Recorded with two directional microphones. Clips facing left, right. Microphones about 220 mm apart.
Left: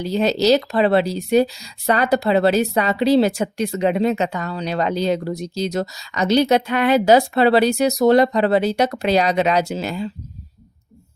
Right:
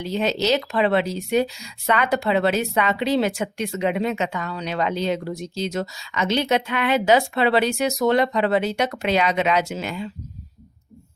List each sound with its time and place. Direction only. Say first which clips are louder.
0.0 s a woman's voice: left 5 dB; 35° left (ahead or behind)